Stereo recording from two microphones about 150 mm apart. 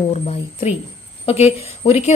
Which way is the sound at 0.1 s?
45° left (ahead or behind).